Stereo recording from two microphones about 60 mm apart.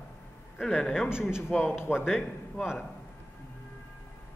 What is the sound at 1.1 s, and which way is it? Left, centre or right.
A man's voice, centre.